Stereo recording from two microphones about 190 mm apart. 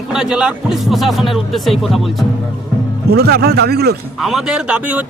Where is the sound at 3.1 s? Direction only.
55° right (ahead or behind).